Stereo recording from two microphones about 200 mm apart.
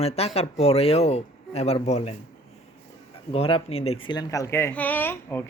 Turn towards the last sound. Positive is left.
turn(degrees=10)  # may be behind; listen again after turning